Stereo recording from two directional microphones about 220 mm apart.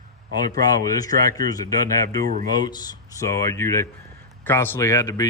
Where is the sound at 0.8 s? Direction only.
15° left (ahead or behind).